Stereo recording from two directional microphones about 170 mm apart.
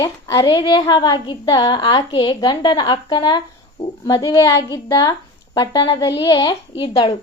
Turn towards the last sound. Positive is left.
turn(degrees=35)  # may be behind; listen again after turning